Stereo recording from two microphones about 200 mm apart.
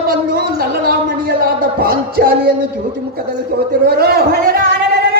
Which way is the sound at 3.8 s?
50° right (ahead or behind).